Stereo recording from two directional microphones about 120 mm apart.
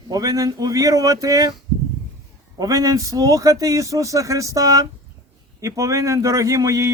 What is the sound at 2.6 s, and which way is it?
A man's voice, 30° right (ahead or behind).